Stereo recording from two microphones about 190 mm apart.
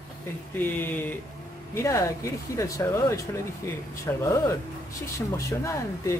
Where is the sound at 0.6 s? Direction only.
10° left (ahead or behind).